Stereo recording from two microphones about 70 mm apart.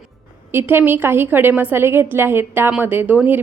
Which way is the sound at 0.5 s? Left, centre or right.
Right.